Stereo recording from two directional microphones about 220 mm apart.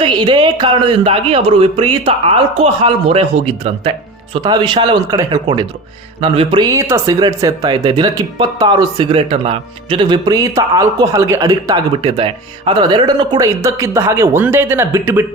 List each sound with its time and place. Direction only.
0.0 s speech: 20° right (ahead or behind)